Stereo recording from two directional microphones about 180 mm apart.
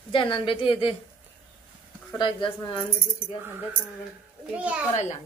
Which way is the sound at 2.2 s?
25° left (ahead or behind).